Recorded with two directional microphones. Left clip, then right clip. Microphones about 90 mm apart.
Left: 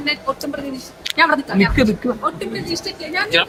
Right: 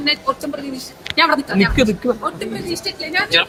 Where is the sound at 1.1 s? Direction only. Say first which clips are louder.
Even; 5° left (ahead or behind).